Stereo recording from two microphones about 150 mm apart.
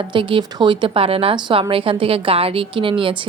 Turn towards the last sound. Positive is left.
turn(degrees=-35)  # may be behind; listen again after turning